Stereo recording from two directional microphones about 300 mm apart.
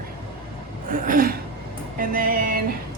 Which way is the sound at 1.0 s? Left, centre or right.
Right.